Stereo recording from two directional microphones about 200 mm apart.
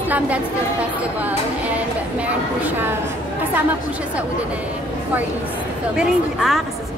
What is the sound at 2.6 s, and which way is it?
Speech, 10° right (ahead or behind).